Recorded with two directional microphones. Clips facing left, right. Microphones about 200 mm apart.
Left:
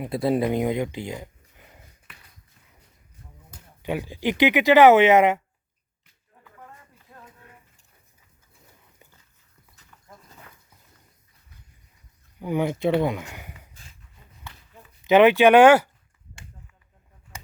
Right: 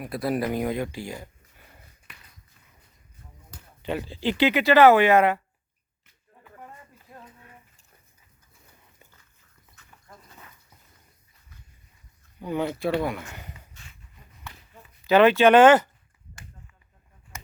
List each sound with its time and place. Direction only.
0.0 s speech: 25° left (ahead or behind)
3.8 s speech: 10° left (ahead or behind)
12.4 s speech: 15° left (ahead or behind)
15.0 s speech: 15° left (ahead or behind)